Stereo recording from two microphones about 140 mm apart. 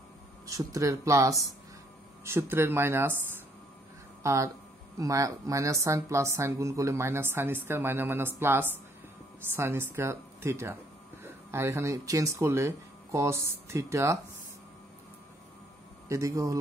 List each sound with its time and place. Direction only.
0.5 s speech: 25° right (ahead or behind)
16.1 s speech: 25° right (ahead or behind)